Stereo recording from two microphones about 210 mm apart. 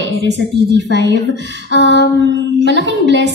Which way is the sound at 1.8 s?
55° left (ahead or behind).